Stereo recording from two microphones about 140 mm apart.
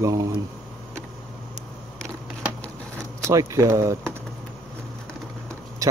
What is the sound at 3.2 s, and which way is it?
Speech, 20° right (ahead or behind).